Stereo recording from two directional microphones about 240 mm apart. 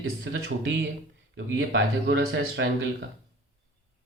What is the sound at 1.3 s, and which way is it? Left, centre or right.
Speech, right.